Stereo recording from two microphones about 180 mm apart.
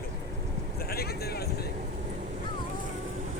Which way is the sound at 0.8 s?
60° left (ahead or behind).